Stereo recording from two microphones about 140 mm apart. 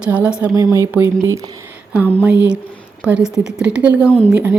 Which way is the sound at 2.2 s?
10° right (ahead or behind).